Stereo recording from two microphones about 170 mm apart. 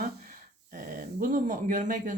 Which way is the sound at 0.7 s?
55° right (ahead or behind).